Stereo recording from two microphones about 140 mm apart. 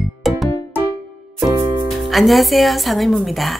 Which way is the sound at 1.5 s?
30° right (ahead or behind).